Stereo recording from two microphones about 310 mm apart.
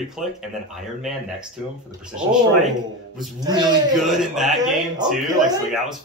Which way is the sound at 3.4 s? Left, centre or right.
Centre.